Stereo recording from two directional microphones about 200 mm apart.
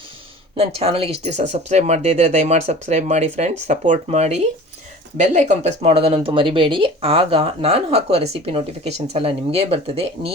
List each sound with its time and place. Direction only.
0.5 s speech: 30° right (ahead or behind)